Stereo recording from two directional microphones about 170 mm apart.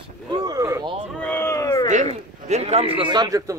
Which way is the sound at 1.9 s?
45° right (ahead or behind).